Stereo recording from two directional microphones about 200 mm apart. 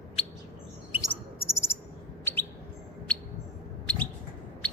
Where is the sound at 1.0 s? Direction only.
15° left (ahead or behind).